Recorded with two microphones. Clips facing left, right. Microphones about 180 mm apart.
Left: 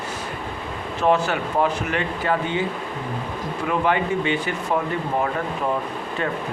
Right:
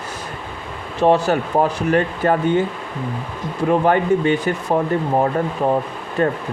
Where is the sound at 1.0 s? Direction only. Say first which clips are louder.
Right 5 dB; 35° right (ahead or behind).